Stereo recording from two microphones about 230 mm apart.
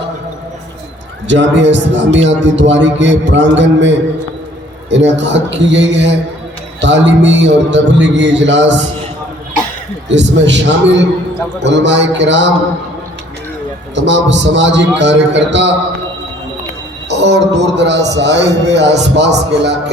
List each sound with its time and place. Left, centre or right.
1.3 s a man's voice: right
10.1 s a man's voice: right
13.9 s a man's voice: right
17.1 s a man's voice: right